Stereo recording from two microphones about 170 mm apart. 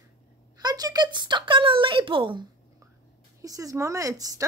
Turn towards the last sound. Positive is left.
turn(degrees=-20)  # may be behind; listen again after turning